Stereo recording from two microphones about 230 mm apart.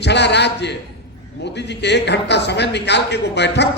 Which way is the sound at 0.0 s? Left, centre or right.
Left.